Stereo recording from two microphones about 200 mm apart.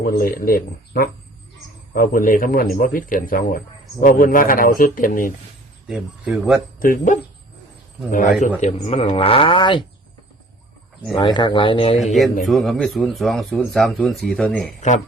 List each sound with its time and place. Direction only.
0.0 s a man's voice: 45° left (ahead or behind)
5.9 s speech: 5° right (ahead or behind)
6.7 s speech: 45° left (ahead or behind); by 9.8 s 25° left (ahead or behind)
11.1 s speech: 20° left (ahead or behind)
12.5 s speech: centre (ahead or behind)
14.8 s speech: 40° left (ahead or behind)